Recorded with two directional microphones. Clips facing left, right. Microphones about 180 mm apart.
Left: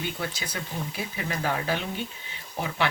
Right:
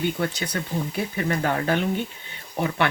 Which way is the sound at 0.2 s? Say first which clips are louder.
Right 7 dB; 65° right (ahead or behind).